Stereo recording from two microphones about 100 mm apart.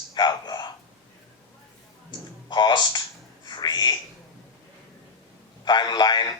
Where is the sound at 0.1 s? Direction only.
45° left (ahead or behind).